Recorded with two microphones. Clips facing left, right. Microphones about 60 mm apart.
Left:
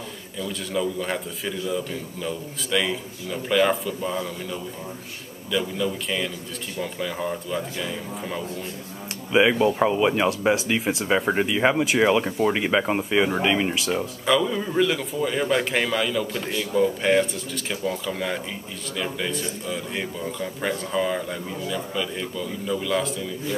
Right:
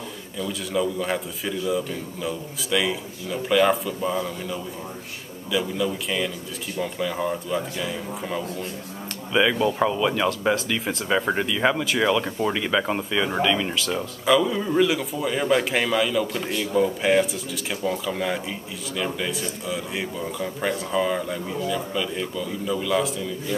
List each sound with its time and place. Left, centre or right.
0.4 s a man's voice: centre
9.3 s speech: centre
14.2 s a man's voice: centre